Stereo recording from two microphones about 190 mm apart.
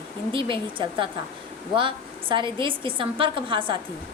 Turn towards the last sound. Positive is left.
turn(degrees=-25)  # may be behind; listen again after turning